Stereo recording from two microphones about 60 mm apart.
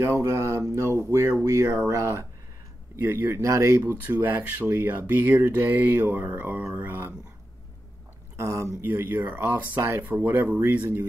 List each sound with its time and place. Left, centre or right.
0.0 s speech: right
1.4 s speech: right
3.0 s speech: right
3.8 s mantra: right
8.4 s speech: right
8.8 s mantra: right
9.8 s speech: right
10.1 s speech: right